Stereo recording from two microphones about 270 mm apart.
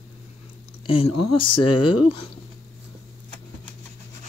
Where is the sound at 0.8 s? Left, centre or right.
Left.